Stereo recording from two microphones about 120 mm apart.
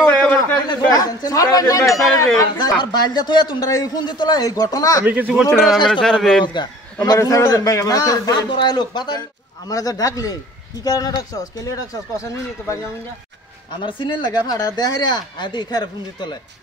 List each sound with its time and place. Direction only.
0.4 s a man's voice: 30° left (ahead or behind)
5.0 s speech: 15° right (ahead or behind); by 6.4 s 5° left (ahead or behind)
6.4 s a man's voice: 40° left (ahead or behind)
7.2 s a man's voice: 30° left (ahead or behind)
13.8 s a man's voice: 45° left (ahead or behind)